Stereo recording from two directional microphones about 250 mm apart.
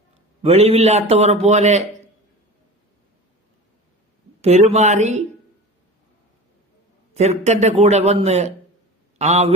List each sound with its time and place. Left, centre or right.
0.4 s a man's voice: right
4.4 s a sound: right
4.7 s a man's voice: right
7.1 s a man's voice: right